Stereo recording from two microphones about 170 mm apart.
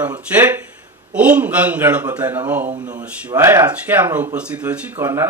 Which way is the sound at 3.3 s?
20° right (ahead or behind).